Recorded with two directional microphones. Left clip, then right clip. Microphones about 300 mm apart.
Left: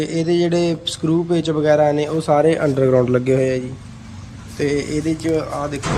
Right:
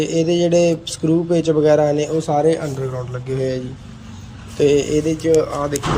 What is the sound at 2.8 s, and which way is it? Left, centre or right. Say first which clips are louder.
Speech: left 12 dB; left.